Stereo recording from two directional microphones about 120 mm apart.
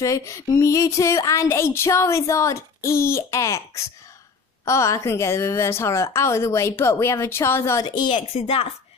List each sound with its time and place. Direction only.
0.0 s a sound: 25° left (ahead or behind)
7.8 s a woman's voice: 40° left (ahead or behind)
8.3 s a woman's voice: 55° left (ahead or behind)